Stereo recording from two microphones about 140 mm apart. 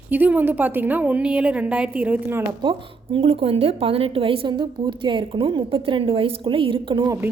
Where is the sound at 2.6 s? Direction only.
35° right (ahead or behind).